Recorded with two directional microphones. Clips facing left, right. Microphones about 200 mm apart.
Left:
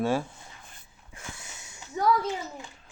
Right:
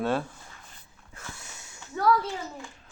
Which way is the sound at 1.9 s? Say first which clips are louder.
Right 1 dB; 15° left (ahead or behind).